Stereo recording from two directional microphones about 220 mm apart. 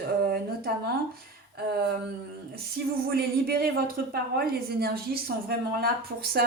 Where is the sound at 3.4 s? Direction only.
45° right (ahead or behind).